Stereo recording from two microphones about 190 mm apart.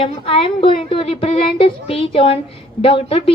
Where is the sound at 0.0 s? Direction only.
30° left (ahead or behind).